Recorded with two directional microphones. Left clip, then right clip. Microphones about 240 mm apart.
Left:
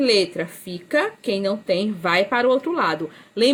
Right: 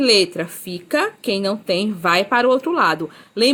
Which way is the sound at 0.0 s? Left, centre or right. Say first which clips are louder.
Right 3 dB; centre.